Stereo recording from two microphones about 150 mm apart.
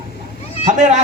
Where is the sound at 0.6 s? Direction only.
55° right (ahead or behind).